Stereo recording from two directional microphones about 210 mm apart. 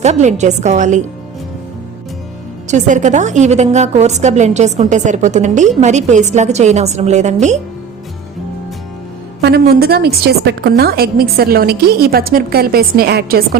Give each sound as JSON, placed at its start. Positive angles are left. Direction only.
{"t": 0.0, "sound": "a woman's voice", "side_deg": -35}
{"t": 2.6, "sound": "a woman's voice", "side_deg": -35}
{"t": 9.4, "sound": "a woman's voice", "side_deg": -50}